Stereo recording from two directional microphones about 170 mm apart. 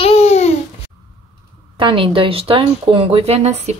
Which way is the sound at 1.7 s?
30° right (ahead or behind).